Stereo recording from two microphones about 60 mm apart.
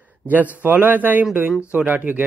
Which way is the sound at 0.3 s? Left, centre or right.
Right.